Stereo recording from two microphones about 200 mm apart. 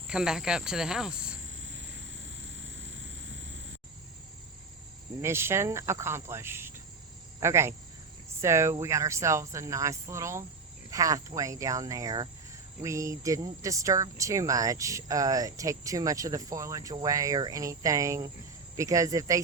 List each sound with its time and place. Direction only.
0.1 s speech: 5° right (ahead or behind)
1.4 s vehicle: 75° right (ahead or behind)
5.2 s speech: 10° right (ahead or behind)